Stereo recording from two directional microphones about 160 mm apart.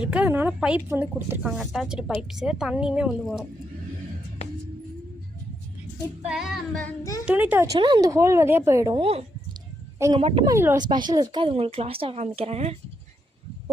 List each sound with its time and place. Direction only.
0.0 s speech: 10° right (ahead or behind)
6.2 s speech: 5° right (ahead or behind)
7.7 s speech: 30° right (ahead or behind)
9.0 s a woman's voice: 40° right (ahead or behind)
10.4 s speech: 15° right (ahead or behind)
10.8 s a woman's voice: 30° right (ahead or behind)